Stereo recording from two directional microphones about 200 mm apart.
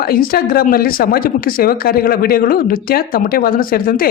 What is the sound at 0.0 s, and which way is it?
Speech, 45° left (ahead or behind).